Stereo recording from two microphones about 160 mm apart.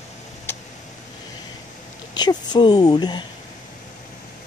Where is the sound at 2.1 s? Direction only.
25° left (ahead or behind).